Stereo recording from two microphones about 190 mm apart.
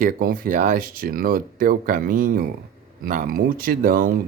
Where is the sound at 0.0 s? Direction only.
50° right (ahead or behind).